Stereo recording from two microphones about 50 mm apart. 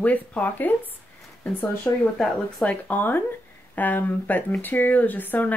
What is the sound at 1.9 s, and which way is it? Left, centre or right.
Speech, left.